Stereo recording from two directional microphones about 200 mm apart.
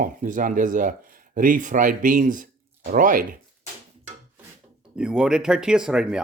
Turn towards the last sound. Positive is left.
turn(degrees=-5)  # may be behind; listen again after turning